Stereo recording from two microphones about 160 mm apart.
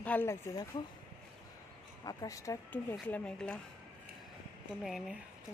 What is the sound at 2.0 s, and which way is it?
Speech, 25° left (ahead or behind).